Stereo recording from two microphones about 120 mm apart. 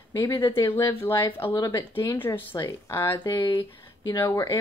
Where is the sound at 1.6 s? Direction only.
30° left (ahead or behind).